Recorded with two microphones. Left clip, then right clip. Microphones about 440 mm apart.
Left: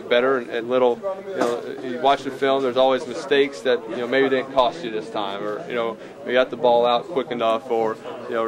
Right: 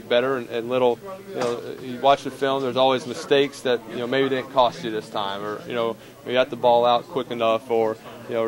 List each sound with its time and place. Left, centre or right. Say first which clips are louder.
0.1 s a man's voice: left 2 dB; right
2.0 s a man's voice: even; right